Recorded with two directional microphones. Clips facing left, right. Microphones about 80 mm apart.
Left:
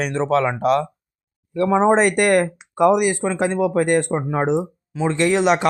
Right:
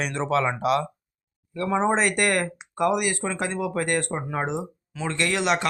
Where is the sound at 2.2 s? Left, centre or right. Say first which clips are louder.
Left 7 dB; left.